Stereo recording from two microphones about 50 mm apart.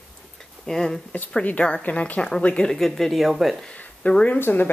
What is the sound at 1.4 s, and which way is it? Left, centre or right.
A woman's voice, left.